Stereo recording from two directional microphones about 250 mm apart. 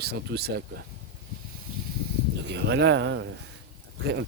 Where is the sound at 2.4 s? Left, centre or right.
Right.